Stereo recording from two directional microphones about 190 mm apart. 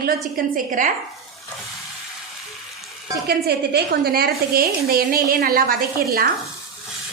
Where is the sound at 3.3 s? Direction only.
55° right (ahead or behind).